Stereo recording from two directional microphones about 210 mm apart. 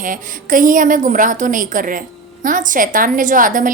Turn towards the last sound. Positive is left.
turn(degrees=-40)  # may be behind; listen again after turning